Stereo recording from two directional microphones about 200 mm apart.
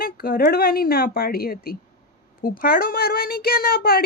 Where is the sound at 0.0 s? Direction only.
45° left (ahead or behind).